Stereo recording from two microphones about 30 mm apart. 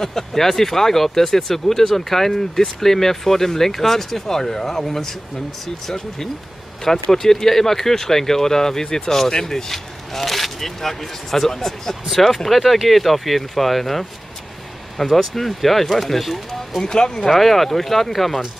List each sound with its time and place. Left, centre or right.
0.0 s speech: centre
9.7 s speech: centre
16.8 s speech: left
17.2 s speech: centre